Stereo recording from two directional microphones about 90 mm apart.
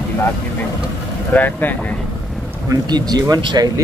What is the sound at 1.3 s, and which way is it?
Speech, 20° left (ahead or behind).